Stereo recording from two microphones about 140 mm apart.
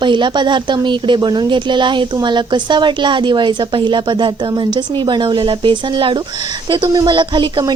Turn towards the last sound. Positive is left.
turn(degrees=-35)  # may be behind; listen again after turning